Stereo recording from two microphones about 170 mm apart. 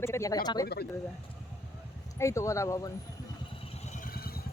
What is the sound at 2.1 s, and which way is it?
Speech, 15° left (ahead or behind).